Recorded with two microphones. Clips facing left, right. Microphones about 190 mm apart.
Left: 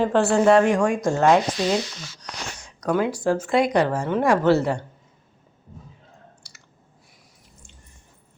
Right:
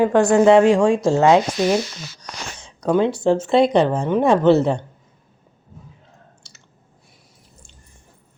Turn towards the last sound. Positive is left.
turn(degrees=-25)  # may be behind; listen again after turning